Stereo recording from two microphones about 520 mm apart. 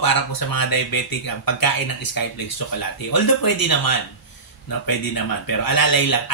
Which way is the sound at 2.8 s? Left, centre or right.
Left.